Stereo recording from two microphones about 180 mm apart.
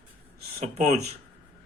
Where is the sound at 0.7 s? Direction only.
40° right (ahead or behind).